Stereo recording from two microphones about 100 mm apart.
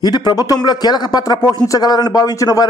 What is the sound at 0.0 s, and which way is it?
A man's voice, 45° left (ahead or behind).